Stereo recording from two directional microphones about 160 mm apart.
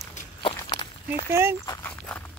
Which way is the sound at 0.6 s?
25° left (ahead or behind).